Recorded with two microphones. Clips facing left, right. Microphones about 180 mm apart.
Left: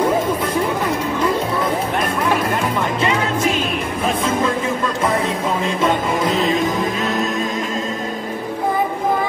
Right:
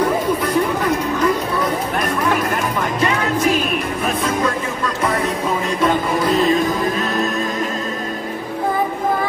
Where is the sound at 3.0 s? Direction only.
25° left (ahead or behind).